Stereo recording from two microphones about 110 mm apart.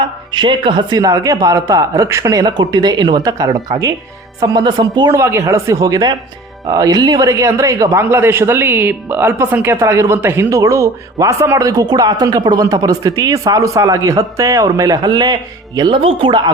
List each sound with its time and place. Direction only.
0.3 s speech: 45° right (ahead or behind)